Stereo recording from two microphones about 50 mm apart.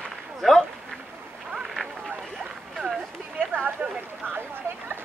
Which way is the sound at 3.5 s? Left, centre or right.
Right.